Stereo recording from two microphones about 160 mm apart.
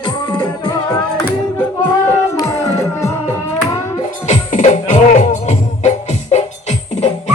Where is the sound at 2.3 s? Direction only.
20° left (ahead or behind).